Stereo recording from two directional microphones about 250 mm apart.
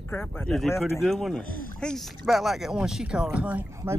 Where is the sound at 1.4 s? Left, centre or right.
Left.